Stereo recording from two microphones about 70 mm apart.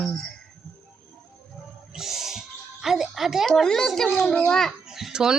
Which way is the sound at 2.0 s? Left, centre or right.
Centre.